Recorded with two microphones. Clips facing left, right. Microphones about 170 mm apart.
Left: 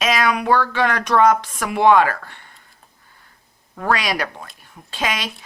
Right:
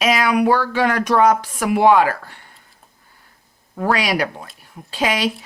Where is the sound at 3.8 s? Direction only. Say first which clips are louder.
Right 2 dB; 20° right (ahead or behind).